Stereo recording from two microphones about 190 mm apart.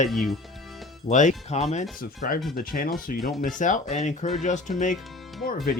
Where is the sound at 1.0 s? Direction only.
40° left (ahead or behind).